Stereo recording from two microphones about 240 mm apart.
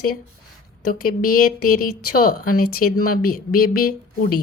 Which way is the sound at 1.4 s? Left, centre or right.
Left.